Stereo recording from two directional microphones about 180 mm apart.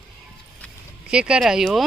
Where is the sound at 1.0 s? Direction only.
5° right (ahead or behind).